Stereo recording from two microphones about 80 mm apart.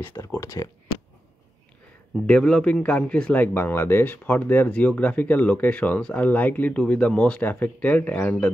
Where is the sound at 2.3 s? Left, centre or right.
Centre.